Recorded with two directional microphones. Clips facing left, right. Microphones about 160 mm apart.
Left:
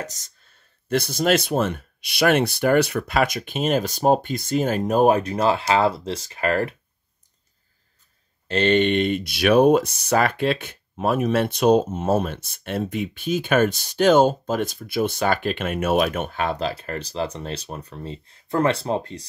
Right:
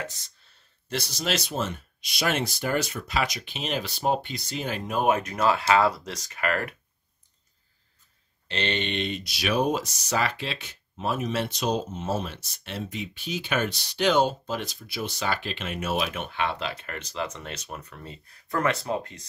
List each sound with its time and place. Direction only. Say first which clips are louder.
0.0 s speech: left 3 dB; 45° left (ahead or behind)
8.5 s speech: left 11 dB; 45° left (ahead or behind); by 19.2 s 30° left (ahead or behind)